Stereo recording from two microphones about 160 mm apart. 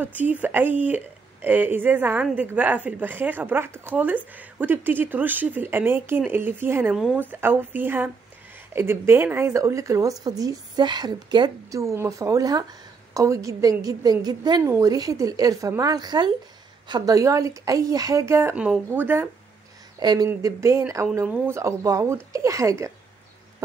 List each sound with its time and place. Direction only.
0.0 s speech: 10° right (ahead or behind)
20.0 s speech: 25° right (ahead or behind)